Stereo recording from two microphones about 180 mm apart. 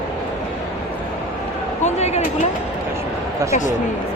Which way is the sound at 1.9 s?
35° left (ahead or behind).